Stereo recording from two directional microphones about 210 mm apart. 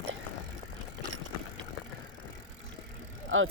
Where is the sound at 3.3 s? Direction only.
70° right (ahead or behind).